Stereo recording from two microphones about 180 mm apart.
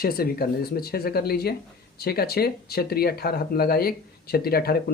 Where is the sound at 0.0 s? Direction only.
55° left (ahead or behind).